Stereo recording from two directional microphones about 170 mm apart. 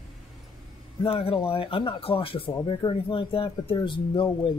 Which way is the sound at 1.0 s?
35° left (ahead or behind).